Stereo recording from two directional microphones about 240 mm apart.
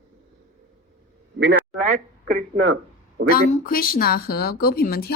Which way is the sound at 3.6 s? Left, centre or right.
Left.